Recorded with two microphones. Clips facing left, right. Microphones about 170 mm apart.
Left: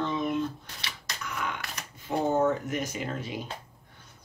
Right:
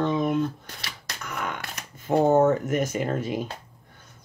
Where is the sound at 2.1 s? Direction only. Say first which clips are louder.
Right 6 dB; 45° right (ahead or behind).